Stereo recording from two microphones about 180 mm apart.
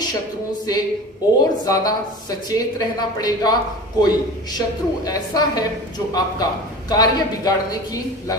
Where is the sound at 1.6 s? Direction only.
20° left (ahead or behind).